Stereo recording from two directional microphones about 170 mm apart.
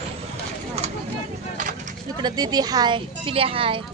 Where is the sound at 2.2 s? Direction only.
25° right (ahead or behind).